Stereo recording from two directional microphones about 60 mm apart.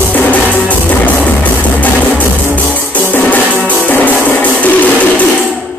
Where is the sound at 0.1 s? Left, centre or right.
Left.